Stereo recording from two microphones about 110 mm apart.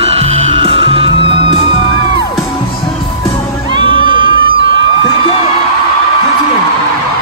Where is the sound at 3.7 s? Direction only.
50° right (ahead or behind).